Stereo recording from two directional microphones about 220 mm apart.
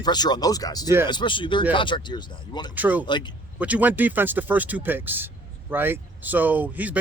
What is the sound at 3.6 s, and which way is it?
Speech, 5° right (ahead or behind).